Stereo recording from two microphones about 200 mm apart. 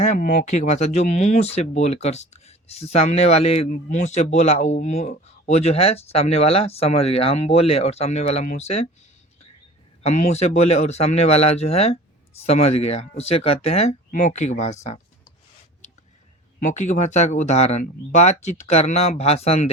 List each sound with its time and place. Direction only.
0.0 s speech: 40° left (ahead or behind)
10.0 s speech: 35° left (ahead or behind)
16.6 s speech: 40° left (ahead or behind)